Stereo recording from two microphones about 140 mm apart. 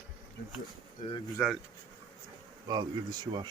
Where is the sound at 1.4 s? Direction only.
10° left (ahead or behind).